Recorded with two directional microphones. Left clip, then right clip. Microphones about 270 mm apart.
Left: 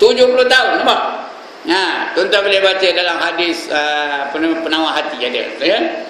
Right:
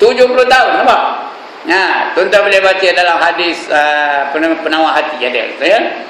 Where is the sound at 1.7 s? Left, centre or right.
Centre.